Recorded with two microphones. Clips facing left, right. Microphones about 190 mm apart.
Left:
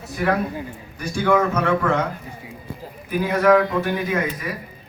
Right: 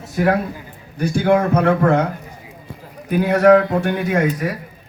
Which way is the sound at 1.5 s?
55° right (ahead or behind).